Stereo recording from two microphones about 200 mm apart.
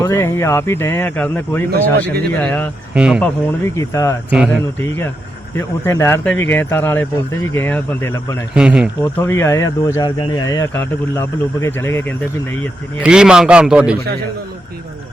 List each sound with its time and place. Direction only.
0.0 s speech: 10° left (ahead or behind)
1.7 s speech: 50° right (ahead or behind)
2.3 s speech: 10° left (ahead or behind)
2.9 s a man's voice: 5° right (ahead or behind)
3.2 s speech: 15° left (ahead or behind)
8.5 s a man's voice: 5° right (ahead or behind)
9.0 s speech: 10° left (ahead or behind)
13.0 s a man's voice: 5° right (ahead or behind)